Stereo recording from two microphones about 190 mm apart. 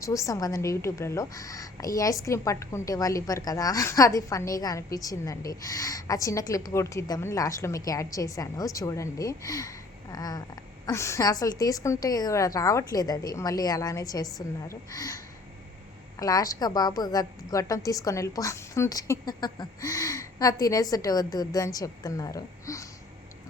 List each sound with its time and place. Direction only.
0.0 s a woman's voice: 15° left (ahead or behind)